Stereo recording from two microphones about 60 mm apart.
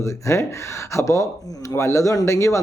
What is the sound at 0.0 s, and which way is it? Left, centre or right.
A man's voice, left.